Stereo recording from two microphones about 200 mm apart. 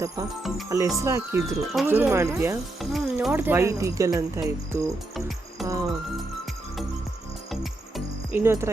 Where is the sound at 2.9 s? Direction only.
5° right (ahead or behind).